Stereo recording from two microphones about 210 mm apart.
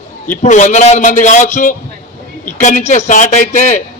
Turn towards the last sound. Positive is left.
turn(degrees=35)  # may be behind; listen again after turning